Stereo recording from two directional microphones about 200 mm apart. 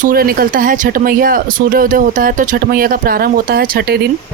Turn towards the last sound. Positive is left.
turn(degrees=-50)  # may be behind; listen again after turning